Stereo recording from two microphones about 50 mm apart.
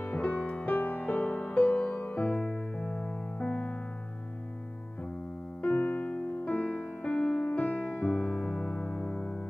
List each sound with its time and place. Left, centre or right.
0.0 s music: left
0.7 s music: left
5.6 s electric piano: left
6.4 s music: left